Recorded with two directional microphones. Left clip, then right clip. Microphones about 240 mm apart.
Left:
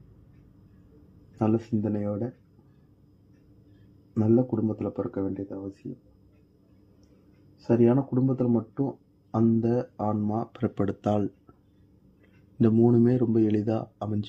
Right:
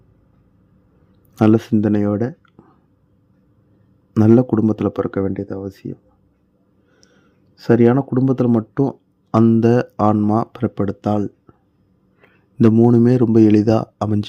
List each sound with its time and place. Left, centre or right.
1.4 s speech: right
4.1 s speech: right
7.5 s speech: right
10.6 s a man's voice: centre